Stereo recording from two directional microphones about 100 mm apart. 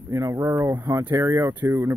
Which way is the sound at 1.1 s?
35° right (ahead or behind).